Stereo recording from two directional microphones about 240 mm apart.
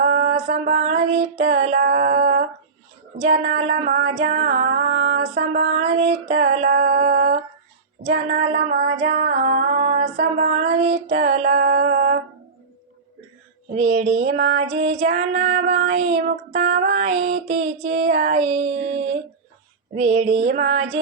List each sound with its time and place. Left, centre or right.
0.1 s female singing: right
3.2 s child singing: right
4.3 s female singing: right
13.7 s child singing: right